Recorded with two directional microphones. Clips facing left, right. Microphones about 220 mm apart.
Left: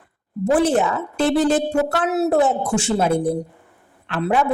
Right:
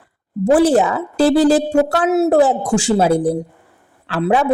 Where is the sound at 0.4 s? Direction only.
30° right (ahead or behind).